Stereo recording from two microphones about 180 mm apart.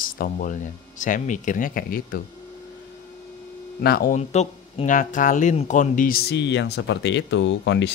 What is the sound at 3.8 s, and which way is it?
Speech, 55° left (ahead or behind).